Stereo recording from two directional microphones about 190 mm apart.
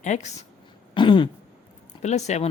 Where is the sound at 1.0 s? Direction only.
25° left (ahead or behind).